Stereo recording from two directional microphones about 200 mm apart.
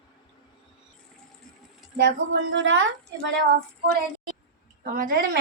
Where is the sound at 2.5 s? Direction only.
70° right (ahead or behind).